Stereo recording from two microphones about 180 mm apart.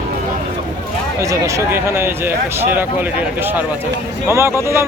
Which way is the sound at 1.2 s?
15° right (ahead or behind).